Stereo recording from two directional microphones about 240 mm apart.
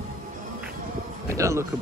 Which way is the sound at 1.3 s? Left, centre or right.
Centre.